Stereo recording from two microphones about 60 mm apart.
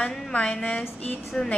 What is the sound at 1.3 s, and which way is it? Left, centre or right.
Speech, centre.